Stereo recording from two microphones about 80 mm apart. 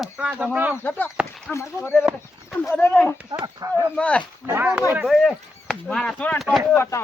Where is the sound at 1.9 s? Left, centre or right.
Centre.